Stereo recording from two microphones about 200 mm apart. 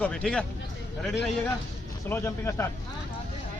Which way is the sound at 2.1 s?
15° left (ahead or behind).